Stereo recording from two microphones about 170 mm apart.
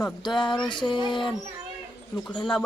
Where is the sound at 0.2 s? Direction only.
25° left (ahead or behind).